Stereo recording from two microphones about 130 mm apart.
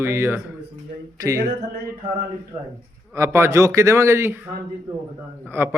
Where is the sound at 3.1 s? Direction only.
20° right (ahead or behind).